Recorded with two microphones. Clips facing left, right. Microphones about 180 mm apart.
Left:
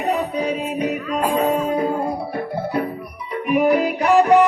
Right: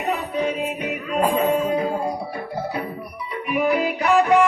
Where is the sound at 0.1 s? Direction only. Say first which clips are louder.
Left 2 dB; 40° left (ahead or behind).